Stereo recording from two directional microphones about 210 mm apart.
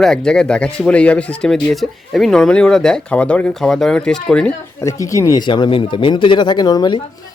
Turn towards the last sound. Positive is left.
turn(degrees=20)  # may be behind; listen again after turning